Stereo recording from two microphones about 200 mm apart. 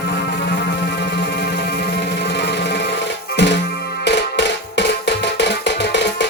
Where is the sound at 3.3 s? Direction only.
60° left (ahead or behind).